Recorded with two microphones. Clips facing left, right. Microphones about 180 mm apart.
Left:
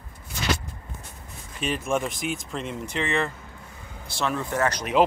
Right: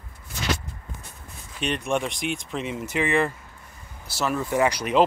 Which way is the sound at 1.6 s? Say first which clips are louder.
Even; centre (ahead or behind).